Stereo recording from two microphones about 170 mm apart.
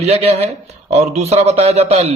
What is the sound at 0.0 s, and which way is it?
A man's voice, 40° right (ahead or behind).